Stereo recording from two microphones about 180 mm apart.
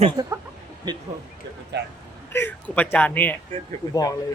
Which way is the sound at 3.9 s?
20° left (ahead or behind).